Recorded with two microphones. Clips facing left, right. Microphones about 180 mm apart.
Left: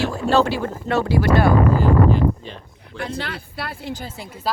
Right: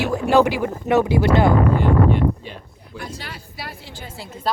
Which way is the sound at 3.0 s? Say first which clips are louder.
Left 6 dB; 60° left (ahead or behind).